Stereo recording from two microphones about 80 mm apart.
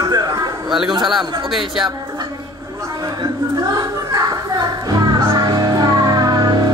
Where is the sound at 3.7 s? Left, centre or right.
Right.